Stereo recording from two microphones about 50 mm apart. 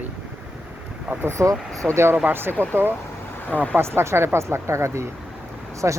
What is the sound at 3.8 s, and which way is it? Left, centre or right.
Speech, right.